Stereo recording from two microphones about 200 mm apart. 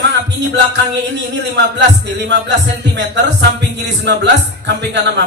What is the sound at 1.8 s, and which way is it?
Speech, 60° right (ahead or behind).